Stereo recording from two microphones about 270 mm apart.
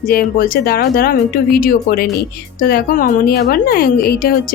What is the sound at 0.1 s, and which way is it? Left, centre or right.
A woman's voice, left.